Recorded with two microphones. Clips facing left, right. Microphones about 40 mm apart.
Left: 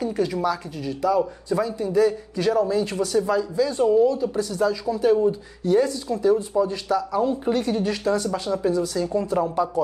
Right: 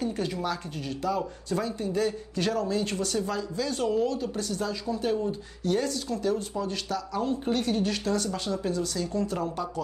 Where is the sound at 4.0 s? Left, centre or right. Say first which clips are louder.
Left 10 dB; right.